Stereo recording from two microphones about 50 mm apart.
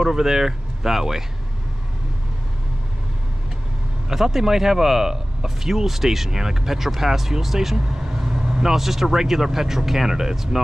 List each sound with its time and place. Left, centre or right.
0.0 s speech: centre
4.1 s speech: centre